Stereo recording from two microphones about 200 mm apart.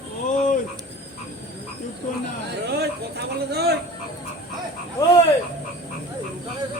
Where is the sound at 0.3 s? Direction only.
40° left (ahead or behind).